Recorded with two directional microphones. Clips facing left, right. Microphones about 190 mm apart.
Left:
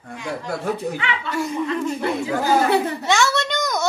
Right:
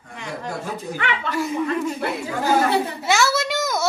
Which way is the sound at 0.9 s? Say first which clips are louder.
Right 1 dB; 60° right (ahead or behind).